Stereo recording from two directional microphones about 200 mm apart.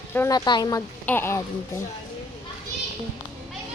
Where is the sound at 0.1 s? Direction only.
15° left (ahead or behind).